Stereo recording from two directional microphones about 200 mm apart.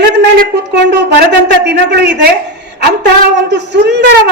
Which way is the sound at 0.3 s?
55° right (ahead or behind).